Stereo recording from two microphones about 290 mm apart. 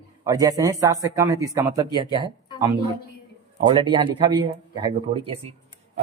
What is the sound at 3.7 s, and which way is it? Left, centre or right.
A man's voice, centre.